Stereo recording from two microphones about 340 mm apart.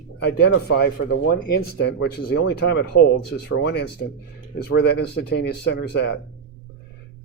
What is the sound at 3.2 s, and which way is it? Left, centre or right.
Speech, left.